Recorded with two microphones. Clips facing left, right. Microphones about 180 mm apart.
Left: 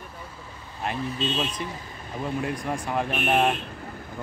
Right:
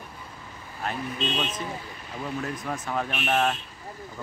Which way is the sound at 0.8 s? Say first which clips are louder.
Left 2 dB; centre (ahead or behind).